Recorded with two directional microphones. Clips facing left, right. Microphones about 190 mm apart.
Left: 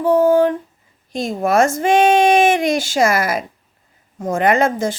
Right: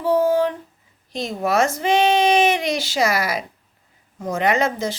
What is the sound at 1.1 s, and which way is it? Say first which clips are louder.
Speech: left 4 dB; 50° left (ahead or behind).